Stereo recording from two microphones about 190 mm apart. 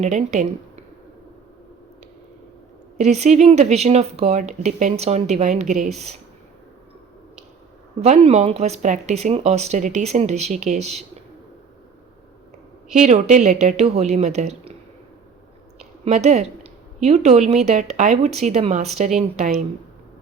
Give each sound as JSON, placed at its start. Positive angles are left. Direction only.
{"t": 0.0, "sound": "speech", "side_deg": -40}
{"t": 3.0, "sound": "speech", "side_deg": -35}
{"t": 8.0, "sound": "speech", "side_deg": -35}
{"t": 12.9, "sound": "speech", "side_deg": -35}
{"t": 15.8, "sound": "speech", "side_deg": -35}